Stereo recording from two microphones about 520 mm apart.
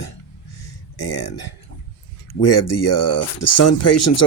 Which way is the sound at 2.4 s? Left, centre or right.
Left.